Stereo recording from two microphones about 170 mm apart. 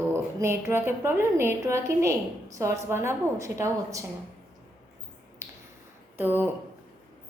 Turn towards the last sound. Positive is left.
turn(degrees=-10)  # may be behind; listen again after turning